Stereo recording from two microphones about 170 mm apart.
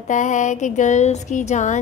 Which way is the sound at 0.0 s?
45° left (ahead or behind).